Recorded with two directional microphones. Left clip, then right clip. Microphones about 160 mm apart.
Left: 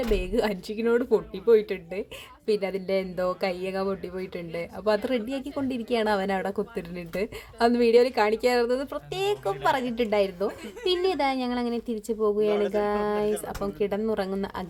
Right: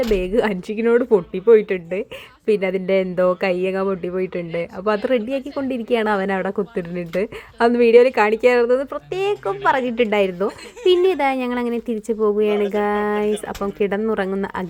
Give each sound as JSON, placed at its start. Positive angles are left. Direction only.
{"t": 0.1, "sound": "speech", "side_deg": -10}
{"t": 12.5, "sound": "a sound", "side_deg": 50}
{"t": 12.8, "sound": "speech", "side_deg": -15}